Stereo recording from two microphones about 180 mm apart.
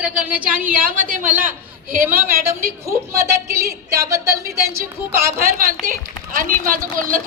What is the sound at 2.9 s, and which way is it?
Speech, 15° right (ahead or behind).